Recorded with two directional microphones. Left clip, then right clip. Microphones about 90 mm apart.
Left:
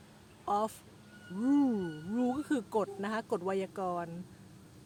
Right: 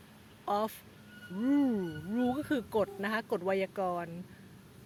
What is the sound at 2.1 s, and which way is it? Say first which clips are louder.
Speech: right 1 dB; 35° left (ahead or behind).